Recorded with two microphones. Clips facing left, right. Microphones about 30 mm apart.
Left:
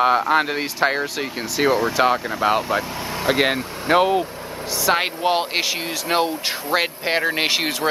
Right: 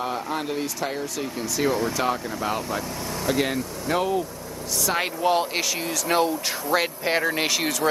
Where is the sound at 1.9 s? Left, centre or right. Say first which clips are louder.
Left 6 dB; left.